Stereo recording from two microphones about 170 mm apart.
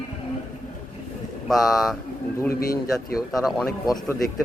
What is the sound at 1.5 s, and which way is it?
Speech, centre (ahead or behind).